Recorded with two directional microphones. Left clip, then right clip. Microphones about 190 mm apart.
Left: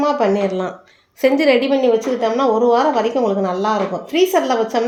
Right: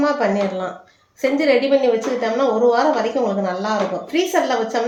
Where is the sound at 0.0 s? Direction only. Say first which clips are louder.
Left 2 dB; 40° left (ahead or behind).